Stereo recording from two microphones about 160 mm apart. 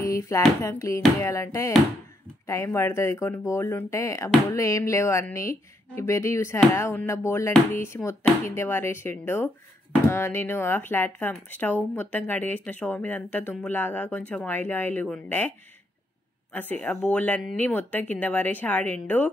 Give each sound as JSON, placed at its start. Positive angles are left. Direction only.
{"t": 0.0, "sound": "a sound", "side_deg": 20}
{"t": 0.6, "sound": "speech", "side_deg": 20}
{"t": 16.5, "sound": "speech", "side_deg": 10}